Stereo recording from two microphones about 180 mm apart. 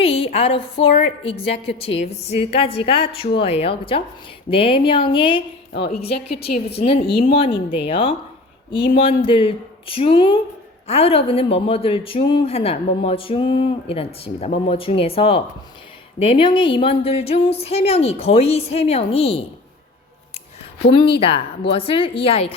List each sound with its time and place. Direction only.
0.0 s a sound: 30° left (ahead or behind)
0.3 s speech: 30° left (ahead or behind)
20.9 s speech: 30° left (ahead or behind)